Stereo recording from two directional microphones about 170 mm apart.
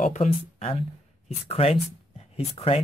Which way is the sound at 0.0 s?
45° left (ahead or behind).